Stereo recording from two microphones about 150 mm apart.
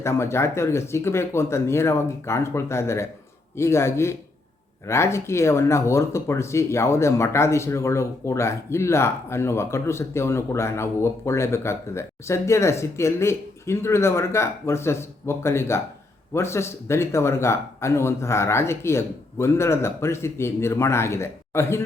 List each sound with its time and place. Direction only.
0.0 s speech: 15° left (ahead or behind)